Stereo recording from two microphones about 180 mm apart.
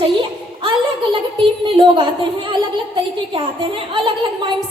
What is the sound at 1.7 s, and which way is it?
A child's voice, 25° right (ahead or behind).